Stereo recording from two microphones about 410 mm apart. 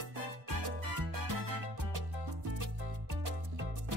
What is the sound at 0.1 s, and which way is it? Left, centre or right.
Music, right.